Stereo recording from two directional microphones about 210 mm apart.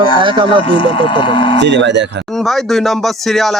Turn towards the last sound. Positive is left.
turn(degrees=0)  # may be behind; listen again after turning